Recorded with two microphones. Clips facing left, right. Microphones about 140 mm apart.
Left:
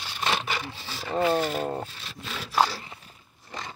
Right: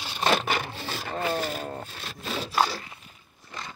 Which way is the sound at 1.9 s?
50° right (ahead or behind).